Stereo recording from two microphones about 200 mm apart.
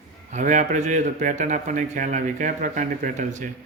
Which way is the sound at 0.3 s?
35° right (ahead or behind).